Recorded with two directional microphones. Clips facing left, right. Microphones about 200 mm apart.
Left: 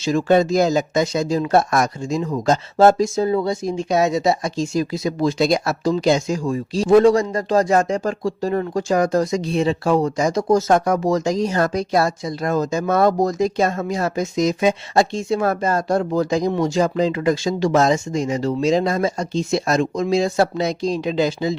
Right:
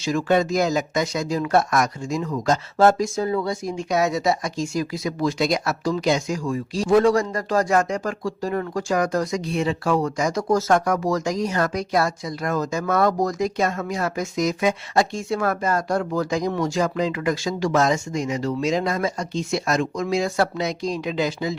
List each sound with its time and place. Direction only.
0.0 s speech: 30° left (ahead or behind)